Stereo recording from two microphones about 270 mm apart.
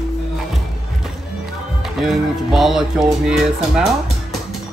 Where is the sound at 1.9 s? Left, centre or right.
Centre.